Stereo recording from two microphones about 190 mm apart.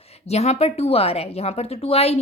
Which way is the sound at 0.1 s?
35° left (ahead or behind).